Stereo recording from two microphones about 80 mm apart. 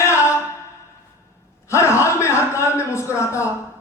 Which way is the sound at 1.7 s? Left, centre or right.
Left.